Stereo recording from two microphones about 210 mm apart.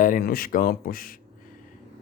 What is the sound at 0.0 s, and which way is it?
Speech, 40° left (ahead or behind).